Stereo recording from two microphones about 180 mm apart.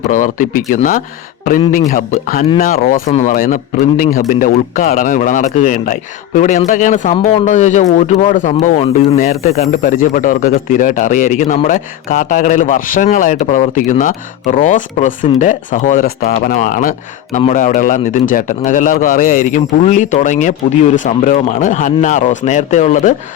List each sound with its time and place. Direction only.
0.1 s speech: 45° left (ahead or behind)
9.3 s speech: 40° left (ahead or behind)